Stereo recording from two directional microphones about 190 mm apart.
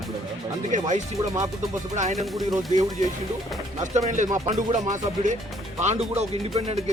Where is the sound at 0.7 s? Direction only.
40° right (ahead or behind).